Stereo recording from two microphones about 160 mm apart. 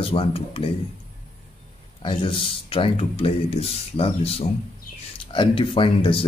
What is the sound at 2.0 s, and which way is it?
Speech, 30° left (ahead or behind).